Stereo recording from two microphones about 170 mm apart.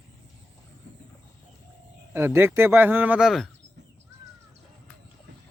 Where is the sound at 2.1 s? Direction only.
15° right (ahead or behind).